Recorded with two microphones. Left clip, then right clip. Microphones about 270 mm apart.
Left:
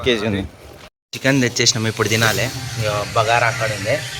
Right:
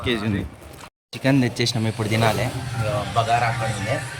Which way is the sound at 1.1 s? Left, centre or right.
Centre.